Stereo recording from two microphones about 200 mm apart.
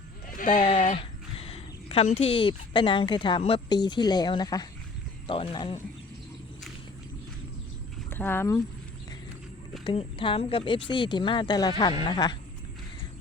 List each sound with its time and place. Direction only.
0.3 s speech: 40° left (ahead or behind)
8.1 s speech: 10° left (ahead or behind)
9.8 s speech: 25° left (ahead or behind)